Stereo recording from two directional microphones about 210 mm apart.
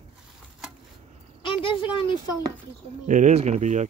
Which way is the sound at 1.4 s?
25° left (ahead or behind).